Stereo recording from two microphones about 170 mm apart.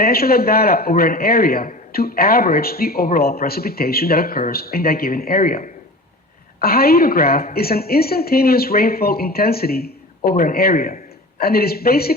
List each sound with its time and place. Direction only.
0.0 s a man's voice: 65° left (ahead or behind)